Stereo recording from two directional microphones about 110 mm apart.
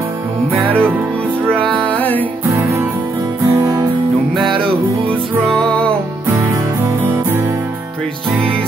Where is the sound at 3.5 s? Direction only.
30° right (ahead or behind).